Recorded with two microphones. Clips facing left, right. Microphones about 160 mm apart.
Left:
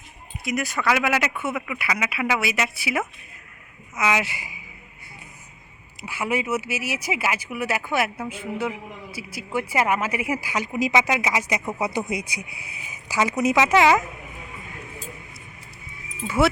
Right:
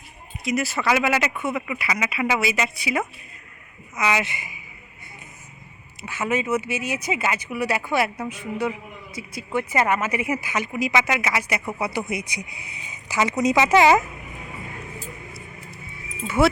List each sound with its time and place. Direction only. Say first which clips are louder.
0.4 s speech: right 1 dB; 5° right (ahead or behind)
6.0 s speech: right 1 dB; 10° left (ahead or behind)
9.5 s speech: right 1 dB; 10° left (ahead or behind)
16.2 s speech: right 1 dB; 10° left (ahead or behind)